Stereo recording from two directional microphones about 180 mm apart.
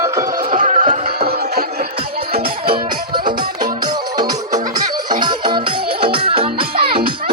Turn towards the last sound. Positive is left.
turn(degrees=-30)  # may be behind; listen again after turning